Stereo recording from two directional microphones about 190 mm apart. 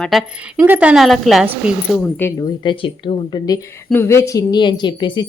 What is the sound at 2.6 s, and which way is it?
Speech, 25° left (ahead or behind).